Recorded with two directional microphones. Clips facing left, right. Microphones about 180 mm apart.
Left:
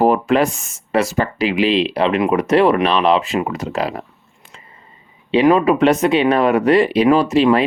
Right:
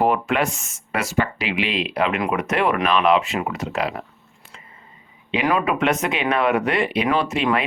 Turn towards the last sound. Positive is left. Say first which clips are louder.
# left 8 dB
turn(degrees=35)  # may be behind; listen again after turning